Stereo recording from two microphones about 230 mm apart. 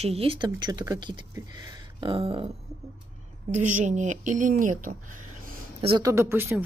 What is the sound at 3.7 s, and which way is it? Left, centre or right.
Speech, right.